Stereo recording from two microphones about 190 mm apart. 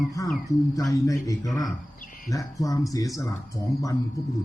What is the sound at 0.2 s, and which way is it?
Speech, 15° left (ahead or behind).